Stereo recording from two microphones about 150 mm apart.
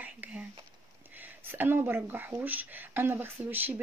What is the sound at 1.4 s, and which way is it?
Speech, 15° right (ahead or behind).